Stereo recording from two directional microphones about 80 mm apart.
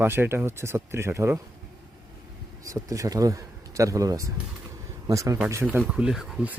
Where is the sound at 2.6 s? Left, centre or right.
Right.